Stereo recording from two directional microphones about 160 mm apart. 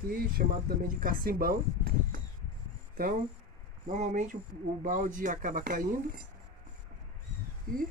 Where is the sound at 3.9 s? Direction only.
50° right (ahead or behind).